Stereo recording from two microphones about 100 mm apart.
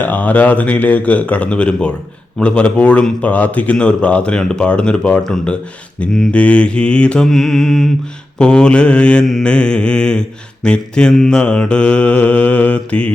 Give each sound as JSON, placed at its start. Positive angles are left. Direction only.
{"t": 0.0, "sound": "mantra", "side_deg": 15}